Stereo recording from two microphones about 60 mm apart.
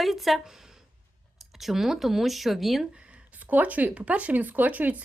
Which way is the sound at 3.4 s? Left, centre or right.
Right.